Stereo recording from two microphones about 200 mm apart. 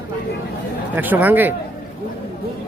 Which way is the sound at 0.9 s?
10° right (ahead or behind).